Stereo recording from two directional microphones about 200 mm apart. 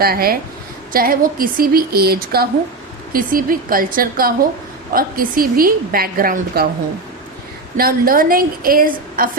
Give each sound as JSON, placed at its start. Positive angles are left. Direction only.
{"t": 0.0, "sound": "a woman's voice", "side_deg": -50}
{"t": 7.8, "sound": "a woman's voice", "side_deg": -45}